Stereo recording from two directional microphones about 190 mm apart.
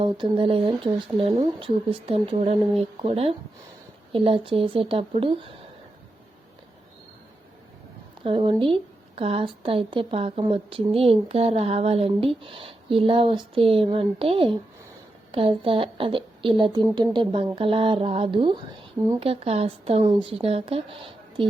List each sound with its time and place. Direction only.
0.0 s speech: 30° right (ahead or behind)
8.2 s speech: 25° right (ahead or behind)